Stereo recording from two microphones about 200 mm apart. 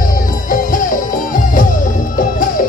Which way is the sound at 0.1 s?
45° left (ahead or behind).